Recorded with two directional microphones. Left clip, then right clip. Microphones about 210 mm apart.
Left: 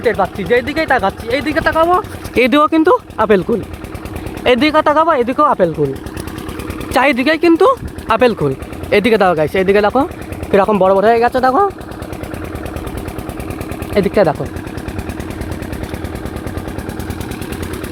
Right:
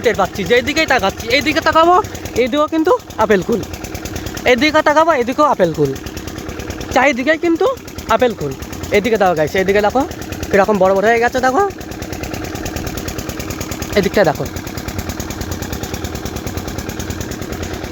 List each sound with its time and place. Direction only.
0.0 s speech: centre (ahead or behind)
1.7 s speech: 45° right (ahead or behind)
2.4 s speech: 25° left (ahead or behind); by 3.4 s 10° left (ahead or behind)
4.4 s speech: 10° left (ahead or behind)
6.9 s speech: 10° left (ahead or behind)
9.2 s speech: 5° left (ahead or behind)
13.9 s speech: 5° left (ahead or behind)